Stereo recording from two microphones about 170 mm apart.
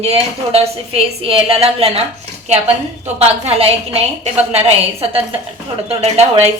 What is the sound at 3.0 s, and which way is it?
A woman's voice, 35° right (ahead or behind).